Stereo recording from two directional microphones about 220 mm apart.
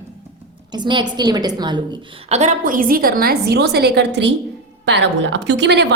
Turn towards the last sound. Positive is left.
turn(degrees=-50)  # may be behind; listen again after turning